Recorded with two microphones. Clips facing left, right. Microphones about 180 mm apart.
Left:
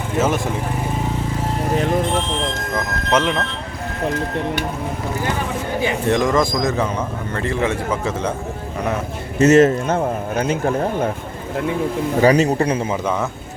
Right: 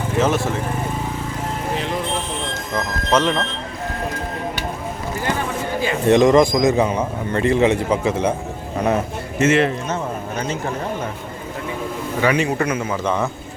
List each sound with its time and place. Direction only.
0.2 s speech: 10° left (ahead or behind)
1.7 s speech: 45° left (ahead or behind)
3.1 s speech: 10° left (ahead or behind)
6.1 s a man's voice: 20° right (ahead or behind)
9.4 s speech: 40° left (ahead or behind)
12.2 s a man's voice: 40° left (ahead or behind)